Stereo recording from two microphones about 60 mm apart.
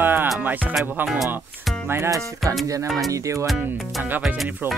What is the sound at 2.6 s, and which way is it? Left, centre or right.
Speech, right.